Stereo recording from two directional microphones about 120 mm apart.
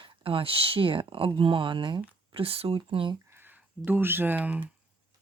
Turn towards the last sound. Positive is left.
turn(degrees=-15)  # may be behind; listen again after turning